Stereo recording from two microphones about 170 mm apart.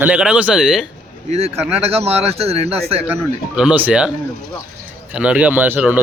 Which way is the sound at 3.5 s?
5° right (ahead or behind).